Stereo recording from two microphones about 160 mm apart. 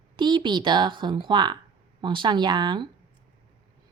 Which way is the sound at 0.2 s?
30° right (ahead or behind).